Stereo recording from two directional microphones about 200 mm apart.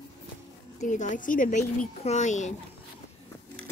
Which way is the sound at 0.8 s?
40° left (ahead or behind).